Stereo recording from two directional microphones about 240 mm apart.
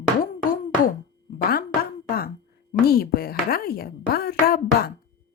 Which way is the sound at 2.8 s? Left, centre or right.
Left.